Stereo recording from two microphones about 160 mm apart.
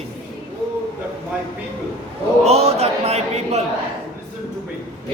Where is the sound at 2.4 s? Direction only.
40° right (ahead or behind).